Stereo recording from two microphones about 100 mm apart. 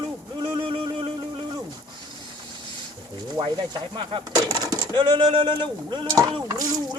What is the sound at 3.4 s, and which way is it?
Speech, 35° right (ahead or behind).